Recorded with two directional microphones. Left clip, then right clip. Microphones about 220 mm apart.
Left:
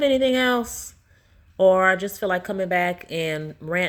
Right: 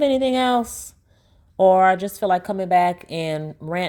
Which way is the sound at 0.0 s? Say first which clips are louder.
Right 1 dB; 25° right (ahead or behind).